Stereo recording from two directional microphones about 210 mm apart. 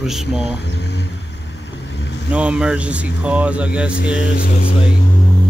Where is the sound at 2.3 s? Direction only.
5° right (ahead or behind).